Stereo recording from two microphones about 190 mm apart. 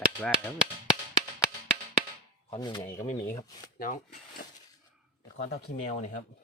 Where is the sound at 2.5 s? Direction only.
20° left (ahead or behind).